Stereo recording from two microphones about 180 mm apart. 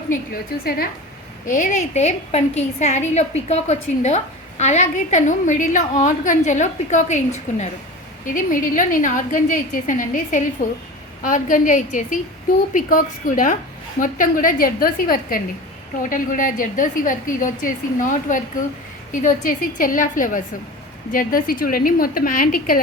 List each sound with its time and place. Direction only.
1.5 s a woman's voice: 45° left (ahead or behind)